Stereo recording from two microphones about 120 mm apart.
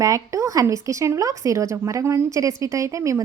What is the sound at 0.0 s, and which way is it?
A woman's voice, 30° right (ahead or behind).